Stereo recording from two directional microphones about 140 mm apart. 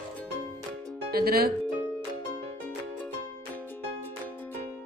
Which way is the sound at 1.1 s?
90° right.